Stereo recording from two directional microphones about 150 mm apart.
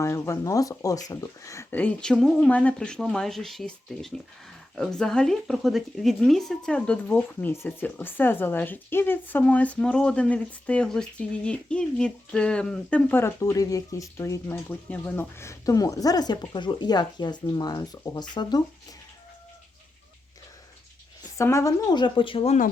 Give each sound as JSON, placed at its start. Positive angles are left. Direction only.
{"t": 0.0, "sound": "speech", "side_deg": 20}
{"t": 21.3, "sound": "speech", "side_deg": 20}